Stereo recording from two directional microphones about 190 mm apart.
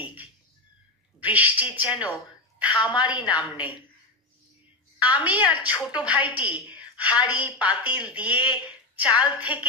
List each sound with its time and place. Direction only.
1.2 s a woman's voice: 10° right (ahead or behind)
2.6 s a sound: 10° right (ahead or behind)
3.0 s a woman's voice: 5° right (ahead or behind)
4.9 s a woman's voice: 10° right (ahead or behind)